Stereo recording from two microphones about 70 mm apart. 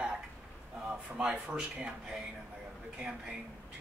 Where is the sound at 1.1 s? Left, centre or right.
Centre.